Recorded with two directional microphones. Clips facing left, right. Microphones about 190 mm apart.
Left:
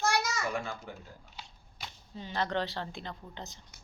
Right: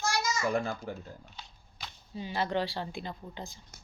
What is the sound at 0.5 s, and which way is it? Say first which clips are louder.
Speech: right 5 dB; 40° right (ahead or behind).